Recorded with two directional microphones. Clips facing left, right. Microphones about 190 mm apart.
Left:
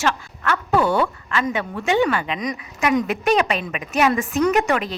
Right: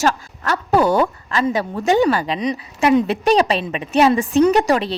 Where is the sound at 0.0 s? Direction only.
40° right (ahead or behind).